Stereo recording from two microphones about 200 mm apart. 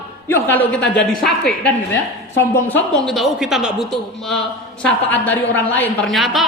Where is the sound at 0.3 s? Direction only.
10° left (ahead or behind).